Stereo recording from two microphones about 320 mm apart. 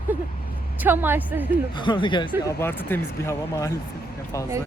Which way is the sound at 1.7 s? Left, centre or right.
Centre.